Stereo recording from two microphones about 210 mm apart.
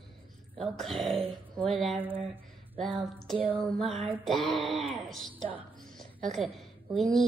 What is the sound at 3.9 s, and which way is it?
Lullaby, 25° right (ahead or behind).